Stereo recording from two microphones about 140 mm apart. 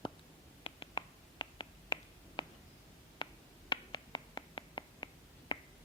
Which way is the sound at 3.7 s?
35° left (ahead or behind).